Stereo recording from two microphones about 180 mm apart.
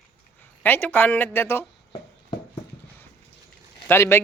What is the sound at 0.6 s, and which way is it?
Speech, 10° left (ahead or behind).